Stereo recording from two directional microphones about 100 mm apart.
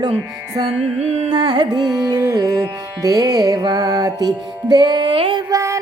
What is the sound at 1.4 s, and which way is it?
Music, 50° right (ahead or behind).